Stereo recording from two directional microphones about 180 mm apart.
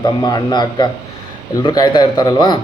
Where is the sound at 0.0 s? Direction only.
25° left (ahead or behind).